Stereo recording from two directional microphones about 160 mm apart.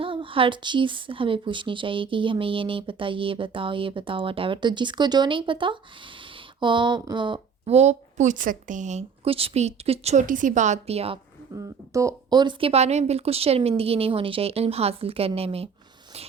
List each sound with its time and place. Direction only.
0.0 s a woman's voice: 35° right (ahead or behind)
11.5 s a woman's voice: 20° right (ahead or behind); by 15.7 s 40° right (ahead or behind)